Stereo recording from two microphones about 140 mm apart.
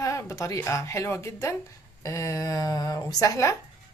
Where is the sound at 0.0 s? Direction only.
20° left (ahead or behind).